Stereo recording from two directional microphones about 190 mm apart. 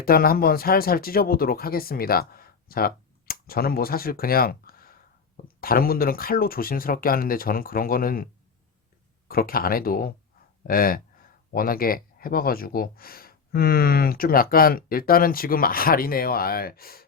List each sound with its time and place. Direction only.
0.0 s speech: 50° left (ahead or behind)
9.3 s speech: 50° left (ahead or behind)